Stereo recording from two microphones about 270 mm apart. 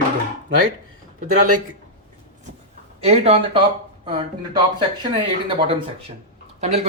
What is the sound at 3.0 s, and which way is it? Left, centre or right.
Speech, right.